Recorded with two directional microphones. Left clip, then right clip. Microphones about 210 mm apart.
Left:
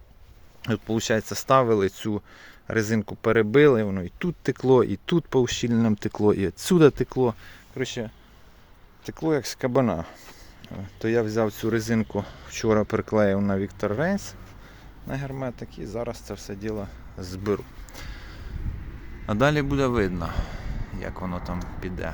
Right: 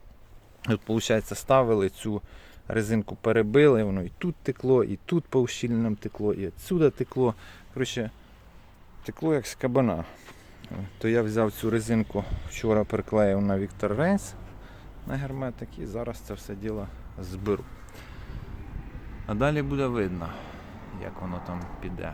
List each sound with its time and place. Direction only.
0.6 s speech: centre (ahead or behind)
7.8 s speech: 10° right (ahead or behind)
9.0 s speech: centre (ahead or behind)
17.9 s a sound: 20° left (ahead or behind)
19.2 s a man's voice: 20° left (ahead or behind)